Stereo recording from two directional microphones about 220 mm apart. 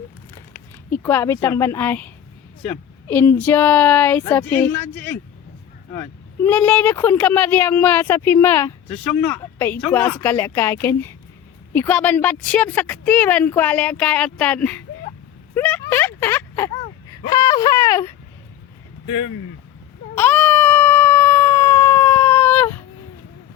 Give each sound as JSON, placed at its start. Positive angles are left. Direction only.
{"t": 0.9, "sound": "speech", "side_deg": 10}
{"t": 15.5, "sound": "a sound", "side_deg": 10}
{"t": 17.1, "sound": "speech", "side_deg": 15}
{"t": 19.0, "sound": "speech", "side_deg": 60}
{"t": 20.1, "sound": "baby cry", "side_deg": 10}